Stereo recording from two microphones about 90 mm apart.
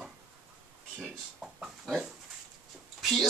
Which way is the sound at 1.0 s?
10° right (ahead or behind).